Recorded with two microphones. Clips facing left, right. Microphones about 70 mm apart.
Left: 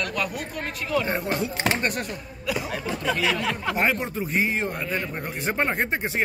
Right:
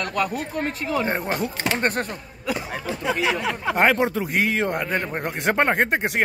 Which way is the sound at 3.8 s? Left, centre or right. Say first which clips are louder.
Right 8 dB; right.